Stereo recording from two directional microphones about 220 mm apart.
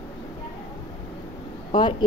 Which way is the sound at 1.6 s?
20° left (ahead or behind).